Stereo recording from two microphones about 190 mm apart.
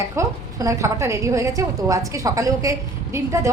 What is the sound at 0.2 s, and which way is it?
A woman's voice, 15° right (ahead or behind).